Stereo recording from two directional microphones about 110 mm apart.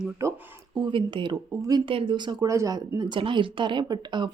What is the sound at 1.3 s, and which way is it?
Speech, 35° right (ahead or behind).